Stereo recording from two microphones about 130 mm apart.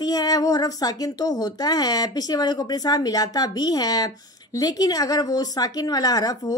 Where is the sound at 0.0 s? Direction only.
30° left (ahead or behind).